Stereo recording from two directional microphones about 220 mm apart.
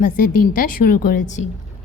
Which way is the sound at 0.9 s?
35° left (ahead or behind).